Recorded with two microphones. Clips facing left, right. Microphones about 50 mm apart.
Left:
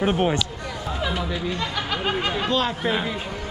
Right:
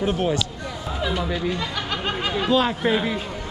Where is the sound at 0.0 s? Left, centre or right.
Left.